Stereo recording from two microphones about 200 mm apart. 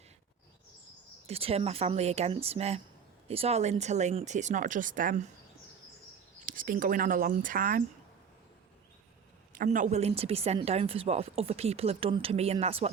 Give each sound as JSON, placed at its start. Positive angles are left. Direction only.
{"t": 1.3, "sound": "speech", "side_deg": -30}
{"t": 6.4, "sound": "speech", "side_deg": -45}
{"t": 9.6, "sound": "speech", "side_deg": -40}